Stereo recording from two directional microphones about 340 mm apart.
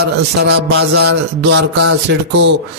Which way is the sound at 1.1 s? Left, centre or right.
Right.